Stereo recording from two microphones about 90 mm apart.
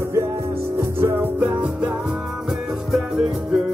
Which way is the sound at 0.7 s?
25° right (ahead or behind).